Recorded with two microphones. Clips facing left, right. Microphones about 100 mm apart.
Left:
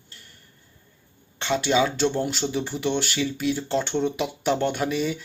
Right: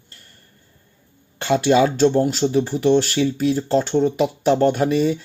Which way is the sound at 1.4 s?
45° right (ahead or behind).